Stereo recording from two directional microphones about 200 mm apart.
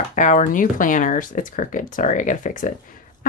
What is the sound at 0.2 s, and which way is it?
Speech, 40° left (ahead or behind).